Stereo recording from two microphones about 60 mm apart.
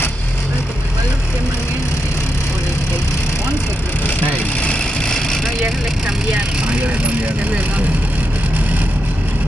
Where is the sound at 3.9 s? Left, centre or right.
Left.